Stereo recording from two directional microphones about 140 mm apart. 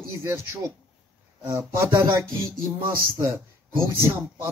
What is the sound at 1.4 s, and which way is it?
A man's voice, 20° right (ahead or behind).